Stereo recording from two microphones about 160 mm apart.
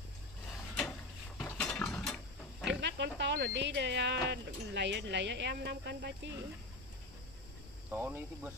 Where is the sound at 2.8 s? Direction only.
90° right.